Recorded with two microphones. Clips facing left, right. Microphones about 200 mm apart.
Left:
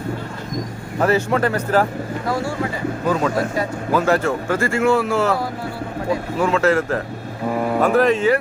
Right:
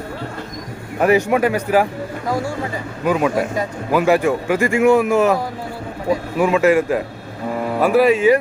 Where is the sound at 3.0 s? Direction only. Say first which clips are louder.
Right 3 dB; 15° right (ahead or behind).